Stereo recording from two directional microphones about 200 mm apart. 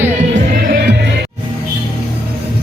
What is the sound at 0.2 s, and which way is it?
Music, 35° right (ahead or behind).